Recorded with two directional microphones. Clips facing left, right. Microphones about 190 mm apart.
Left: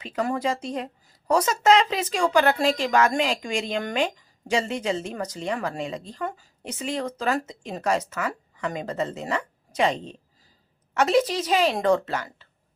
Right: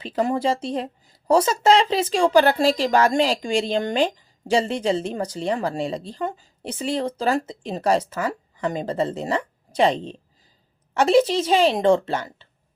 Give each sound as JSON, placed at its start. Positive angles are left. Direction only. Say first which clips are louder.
{"t": 0.0, "sound": "a woman's voice", "louder": "right 4 dB", "side_deg": -30}